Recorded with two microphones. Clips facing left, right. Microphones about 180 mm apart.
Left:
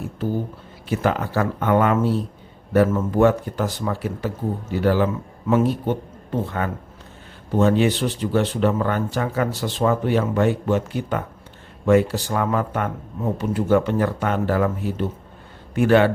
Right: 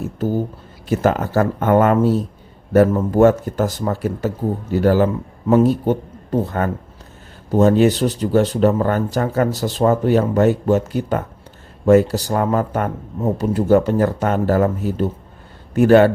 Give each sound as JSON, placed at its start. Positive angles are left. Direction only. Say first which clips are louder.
{"t": 0.2, "sound": "a man's voice", "louder": "right 4 dB", "side_deg": -40}